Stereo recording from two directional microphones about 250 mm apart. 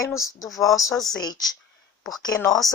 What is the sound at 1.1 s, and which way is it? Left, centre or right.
Speech, centre.